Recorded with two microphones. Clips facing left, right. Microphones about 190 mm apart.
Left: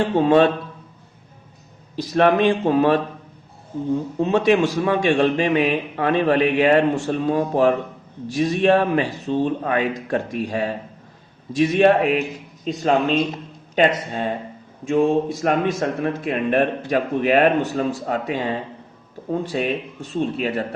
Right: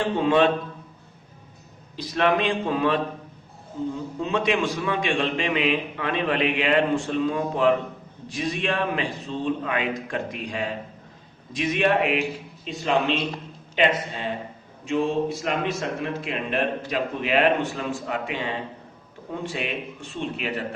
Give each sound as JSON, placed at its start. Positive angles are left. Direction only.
{"t": 0.2, "sound": "a man's voice", "side_deg": 40}
{"t": 2.1, "sound": "a man's voice", "side_deg": 45}
{"t": 4.2, "sound": "a man's voice", "side_deg": 40}